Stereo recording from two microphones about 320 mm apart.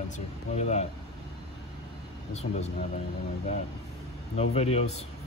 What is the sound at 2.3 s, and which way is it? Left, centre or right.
Speech, centre.